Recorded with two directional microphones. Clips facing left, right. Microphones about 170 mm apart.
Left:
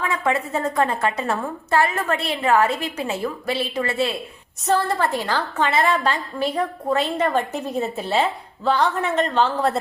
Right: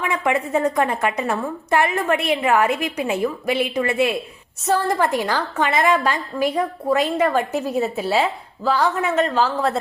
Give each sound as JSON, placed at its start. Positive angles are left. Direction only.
{"t": 0.1, "sound": "a woman's voice", "side_deg": -15}